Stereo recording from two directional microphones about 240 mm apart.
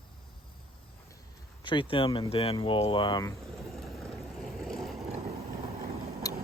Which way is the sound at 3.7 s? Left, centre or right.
Centre.